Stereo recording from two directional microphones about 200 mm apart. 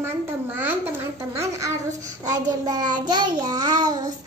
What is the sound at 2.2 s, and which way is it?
Child singing, 15° right (ahead or behind).